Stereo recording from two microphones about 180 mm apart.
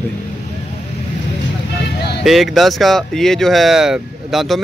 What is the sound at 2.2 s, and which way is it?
Speech, centre (ahead or behind).